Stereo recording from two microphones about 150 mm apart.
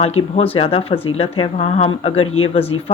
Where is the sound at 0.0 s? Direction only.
45° left (ahead or behind).